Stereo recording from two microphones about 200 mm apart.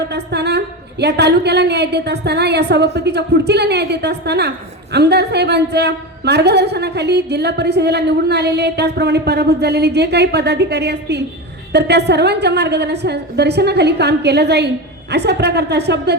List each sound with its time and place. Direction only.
0.1 s a woman's voice: 55° right (ahead or behind)